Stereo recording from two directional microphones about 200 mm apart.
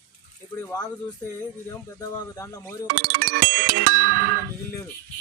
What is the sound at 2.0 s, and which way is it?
Speech, 15° left (ahead or behind).